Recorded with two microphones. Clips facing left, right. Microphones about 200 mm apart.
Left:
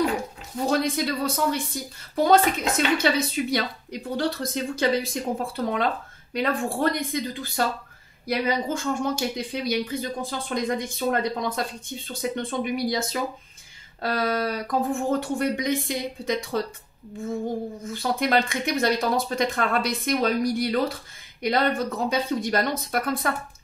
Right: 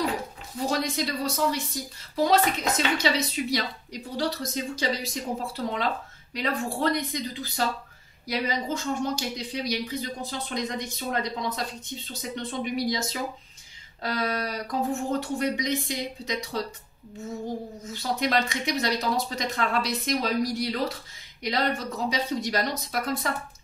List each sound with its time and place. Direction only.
0.7 s a woman's voice: 55° left (ahead or behind)
17.8 s a woman's voice: 55° left (ahead or behind)